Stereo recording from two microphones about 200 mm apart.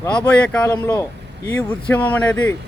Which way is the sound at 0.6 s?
15° left (ahead or behind).